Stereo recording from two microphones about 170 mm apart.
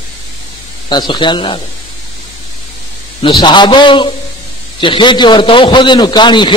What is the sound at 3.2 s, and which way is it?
A man's voice, 30° left (ahead or behind).